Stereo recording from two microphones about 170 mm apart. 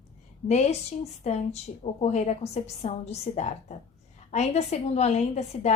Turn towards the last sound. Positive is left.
turn(degrees=40)  # may be behind; listen again after turning